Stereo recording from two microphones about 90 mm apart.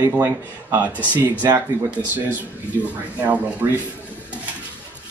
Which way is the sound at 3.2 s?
20° right (ahead or behind).